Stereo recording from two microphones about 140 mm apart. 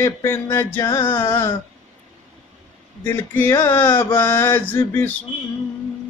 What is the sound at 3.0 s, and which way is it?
Mantra, 15° left (ahead or behind).